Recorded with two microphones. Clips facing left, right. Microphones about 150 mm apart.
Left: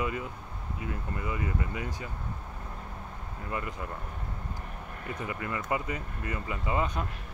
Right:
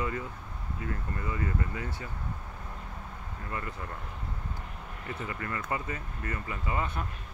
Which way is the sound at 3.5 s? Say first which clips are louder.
Left 3 dB; 20° left (ahead or behind).